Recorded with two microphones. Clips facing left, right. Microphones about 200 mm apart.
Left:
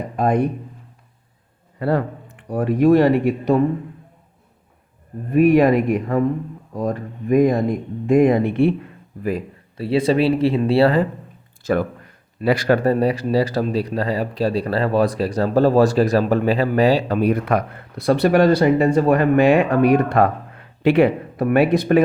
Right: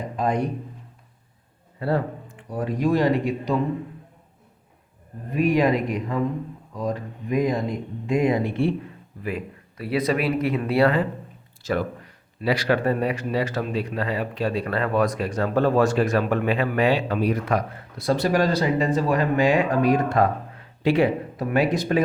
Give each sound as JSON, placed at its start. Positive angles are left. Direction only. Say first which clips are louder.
{"t": 0.2, "sound": "speech", "louder": "left 5 dB", "side_deg": 55}
{"t": 1.8, "sound": "speech", "louder": "left 4 dB", "side_deg": 60}
{"t": 5.3, "sound": "speech", "louder": "left 7 dB", "side_deg": 55}
{"t": 9.2, "sound": "speech", "louder": "left 6 dB", "side_deg": 35}
{"t": 11.6, "sound": "speech", "louder": "left 5 dB", "side_deg": 50}
{"t": 17.2, "sound": "speech", "louder": "left 4 dB", "side_deg": 55}